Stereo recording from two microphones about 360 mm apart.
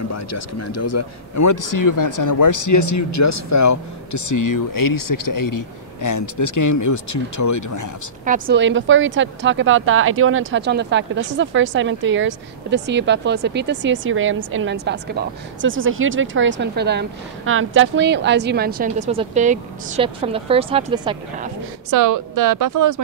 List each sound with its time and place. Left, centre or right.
0.1 s speech: left
8.3 s speech: right
21.9 s speech: right